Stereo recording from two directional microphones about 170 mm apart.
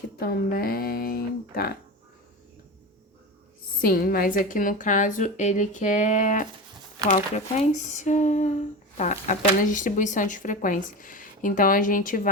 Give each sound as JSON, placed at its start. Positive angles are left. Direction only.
{"t": 0.2, "sound": "speech", "side_deg": 60}
{"t": 3.8, "sound": "speech", "side_deg": 60}